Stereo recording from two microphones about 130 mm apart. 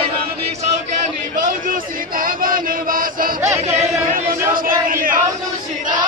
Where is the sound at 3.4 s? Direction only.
20° right (ahead or behind).